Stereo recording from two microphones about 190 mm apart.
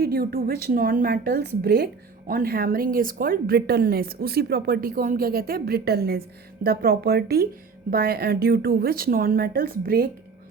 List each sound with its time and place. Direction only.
0.0 s a woman's voice: 55° right (ahead or behind)